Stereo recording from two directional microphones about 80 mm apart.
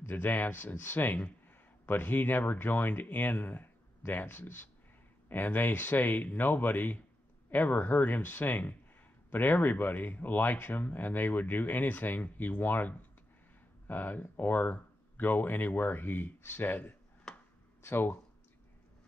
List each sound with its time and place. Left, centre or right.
0.0 s speech: left
17.3 s a sound: centre
17.8 s speech: left